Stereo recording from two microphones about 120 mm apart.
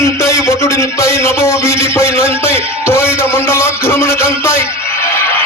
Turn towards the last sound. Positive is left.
turn(degrees=20)  # may be behind; listen again after turning